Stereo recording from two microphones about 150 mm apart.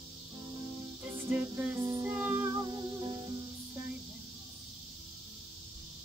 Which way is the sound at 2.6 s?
30° right (ahead or behind).